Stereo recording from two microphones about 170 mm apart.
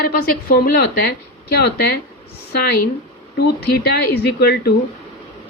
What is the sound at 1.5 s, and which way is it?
Speech, 70° left (ahead or behind).